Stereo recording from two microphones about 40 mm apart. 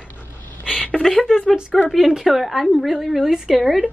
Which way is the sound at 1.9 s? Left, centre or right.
Centre.